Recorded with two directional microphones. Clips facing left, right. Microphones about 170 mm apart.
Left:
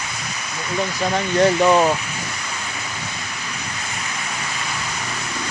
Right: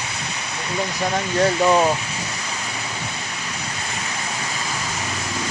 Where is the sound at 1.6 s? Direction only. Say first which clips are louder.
Right 1 dB; centre (ahead or behind).